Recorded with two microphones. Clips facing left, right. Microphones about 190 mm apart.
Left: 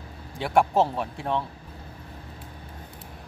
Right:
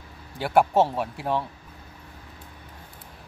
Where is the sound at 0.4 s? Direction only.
Centre (ahead or behind).